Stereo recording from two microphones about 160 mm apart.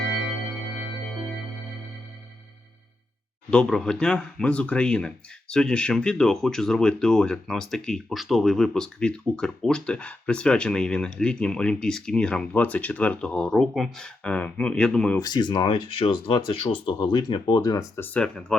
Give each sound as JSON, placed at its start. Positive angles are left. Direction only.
{"t": 3.5, "sound": "speech", "side_deg": 5}
{"t": 15.2, "sound": "speech", "side_deg": 25}